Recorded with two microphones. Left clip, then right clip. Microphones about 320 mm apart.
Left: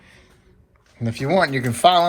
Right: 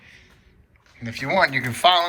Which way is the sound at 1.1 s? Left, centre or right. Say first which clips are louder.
Left 1 dB; centre.